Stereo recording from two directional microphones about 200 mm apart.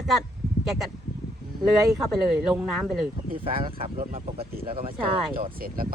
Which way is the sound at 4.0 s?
45° right (ahead or behind).